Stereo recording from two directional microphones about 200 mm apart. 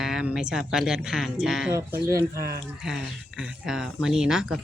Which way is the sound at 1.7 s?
15° right (ahead or behind).